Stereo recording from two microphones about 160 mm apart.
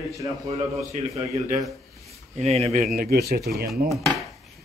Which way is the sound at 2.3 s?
40° right (ahead or behind).